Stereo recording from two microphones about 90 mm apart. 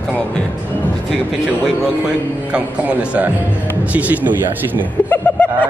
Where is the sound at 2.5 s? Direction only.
15° right (ahead or behind).